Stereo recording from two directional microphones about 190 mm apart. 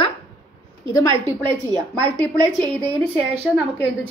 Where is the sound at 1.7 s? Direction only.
20° right (ahead or behind).